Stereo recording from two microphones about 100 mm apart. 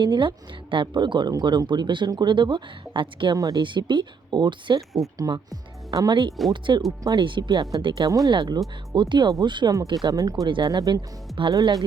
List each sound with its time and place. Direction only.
0.0 s speech: 55° right (ahead or behind)
3.3 s speech: 35° right (ahead or behind)
3.6 s speech: 50° right (ahead or behind)
5.3 s speech: 40° right (ahead or behind)